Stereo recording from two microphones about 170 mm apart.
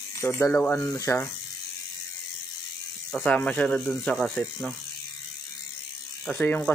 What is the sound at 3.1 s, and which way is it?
Speech, 5° left (ahead or behind).